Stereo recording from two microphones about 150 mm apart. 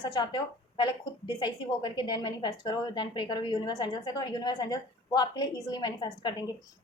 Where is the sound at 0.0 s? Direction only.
30° left (ahead or behind).